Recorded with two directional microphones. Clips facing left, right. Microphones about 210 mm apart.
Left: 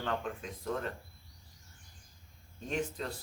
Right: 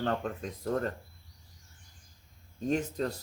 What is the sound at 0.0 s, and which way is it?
Speech, 40° right (ahead or behind).